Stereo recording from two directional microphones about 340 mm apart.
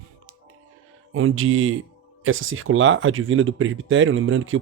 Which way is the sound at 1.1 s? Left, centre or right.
Right.